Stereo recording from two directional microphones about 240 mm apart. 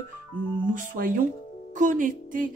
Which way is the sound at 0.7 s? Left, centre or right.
Right.